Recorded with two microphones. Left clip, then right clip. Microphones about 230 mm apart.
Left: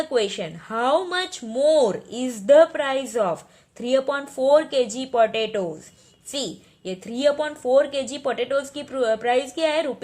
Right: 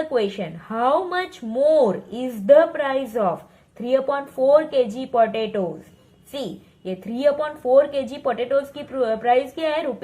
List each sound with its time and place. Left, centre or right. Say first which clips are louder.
0.1 s a woman's voice: even; left